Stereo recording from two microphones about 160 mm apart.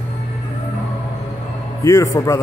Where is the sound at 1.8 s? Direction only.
20° left (ahead or behind).